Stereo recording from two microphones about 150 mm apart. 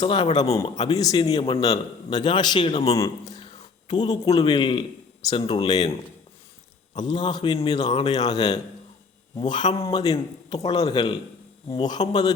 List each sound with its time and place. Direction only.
0.0 s a man's voice: 35° left (ahead or behind)
0.5 s a man's voice: 25° left (ahead or behind); by 3.0 s 40° left (ahead or behind)
3.0 s a man's voice: 25° left (ahead or behind)
6.9 s a man's voice: 30° left (ahead or behind)